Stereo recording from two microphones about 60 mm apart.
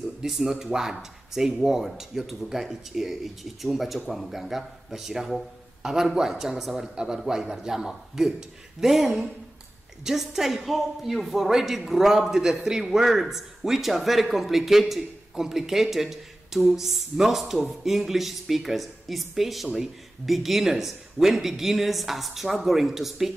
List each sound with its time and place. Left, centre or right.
0.3 s a man's voice: centre